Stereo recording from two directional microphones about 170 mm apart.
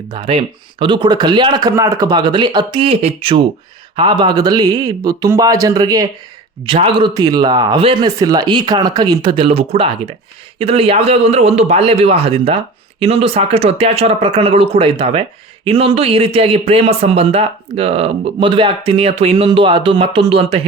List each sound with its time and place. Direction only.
0.1 s a man's voice: 30° right (ahead or behind)
6.7 s a man's voice: 30° right (ahead or behind)